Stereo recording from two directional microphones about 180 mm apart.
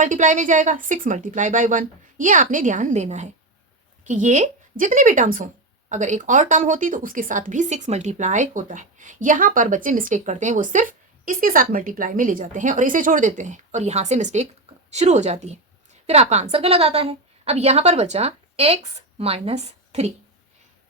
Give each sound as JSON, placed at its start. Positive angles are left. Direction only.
{"t": 0.0, "sound": "a woman's voice", "side_deg": -45}